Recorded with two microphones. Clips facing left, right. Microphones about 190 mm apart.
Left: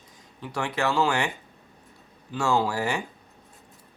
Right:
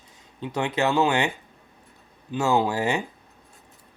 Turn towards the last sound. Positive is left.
turn(degrees=-20)  # may be behind; listen again after turning